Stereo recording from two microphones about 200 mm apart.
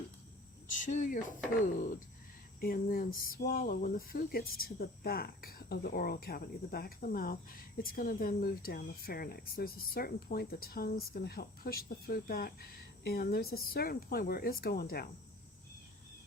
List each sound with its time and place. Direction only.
0.8 s speech: 40° left (ahead or behind)
2.6 s speech: 45° left (ahead or behind)